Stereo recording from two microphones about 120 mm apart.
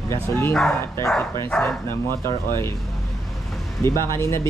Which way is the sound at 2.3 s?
20° left (ahead or behind).